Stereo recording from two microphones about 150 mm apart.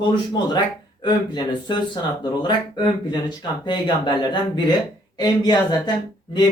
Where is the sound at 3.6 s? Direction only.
30° left (ahead or behind).